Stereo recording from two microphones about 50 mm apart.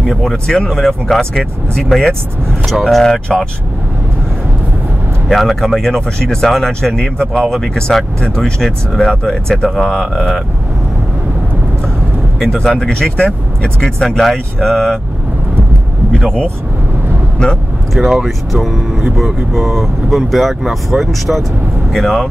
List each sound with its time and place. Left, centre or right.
0.0 s speech: centre
5.3 s speech: centre
7.3 s speech: centre
9.1 s speech: centre
12.4 s speech: centre
17.9 s speech: centre